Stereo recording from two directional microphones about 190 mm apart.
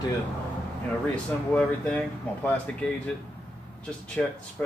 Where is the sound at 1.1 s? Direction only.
5° left (ahead or behind).